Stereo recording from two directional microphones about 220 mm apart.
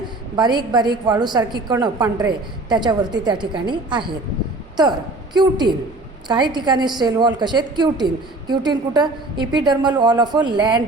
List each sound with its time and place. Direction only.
0.3 s a woman's voice: 20° right (ahead or behind)